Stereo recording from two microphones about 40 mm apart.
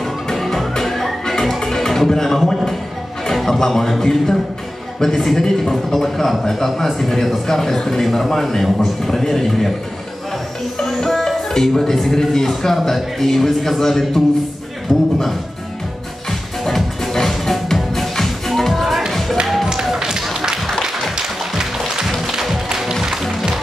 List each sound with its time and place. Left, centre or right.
0.0 s music: centre
3.3 s a man's voice: centre
10.8 s speech: centre
14.9 s a sound: centre
16.3 s music: centre
19.8 s a sound: centre
20.8 s music: centre